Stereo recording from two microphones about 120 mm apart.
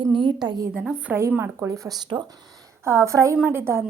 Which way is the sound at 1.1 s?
20° right (ahead or behind).